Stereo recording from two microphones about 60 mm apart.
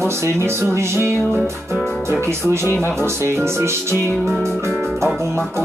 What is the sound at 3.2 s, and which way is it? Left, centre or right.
Speech, right.